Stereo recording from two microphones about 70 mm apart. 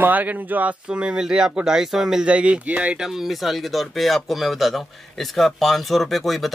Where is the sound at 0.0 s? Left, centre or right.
Right.